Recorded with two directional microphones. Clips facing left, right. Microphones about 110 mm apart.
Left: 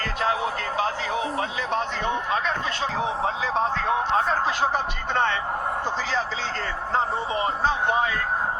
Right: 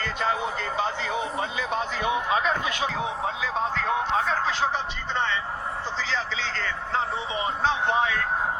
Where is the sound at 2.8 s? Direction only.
35° left (ahead or behind).